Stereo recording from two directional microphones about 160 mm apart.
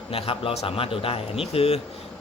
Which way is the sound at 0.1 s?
35° left (ahead or behind).